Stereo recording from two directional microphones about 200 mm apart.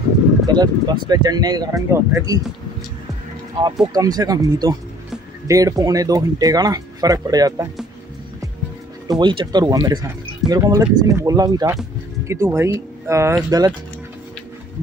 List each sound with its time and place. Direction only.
0.5 s speech: 20° right (ahead or behind)
3.8 s speech: 20° right (ahead or behind)
9.0 s speech: 20° right (ahead or behind)